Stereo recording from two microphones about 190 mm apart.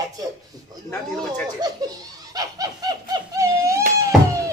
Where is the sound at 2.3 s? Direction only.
20° right (ahead or behind).